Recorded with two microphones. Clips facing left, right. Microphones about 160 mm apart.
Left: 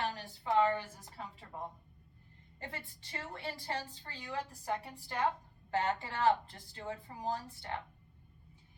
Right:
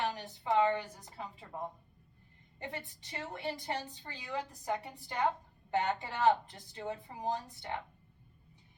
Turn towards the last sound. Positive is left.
turn(degrees=-15)  # may be behind; listen again after turning